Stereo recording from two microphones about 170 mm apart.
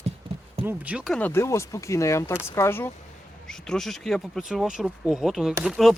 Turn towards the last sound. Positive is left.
turn(degrees=0)  # may be behind; listen again after turning